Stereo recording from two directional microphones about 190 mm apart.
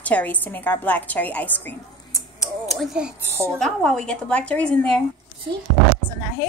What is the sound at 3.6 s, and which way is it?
A woman's voice, 5° left (ahead or behind).